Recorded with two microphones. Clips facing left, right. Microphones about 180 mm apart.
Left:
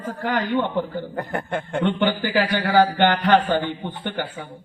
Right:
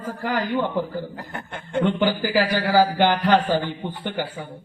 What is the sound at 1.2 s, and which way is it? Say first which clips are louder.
Speech: left 9 dB; 55° left (ahead or behind).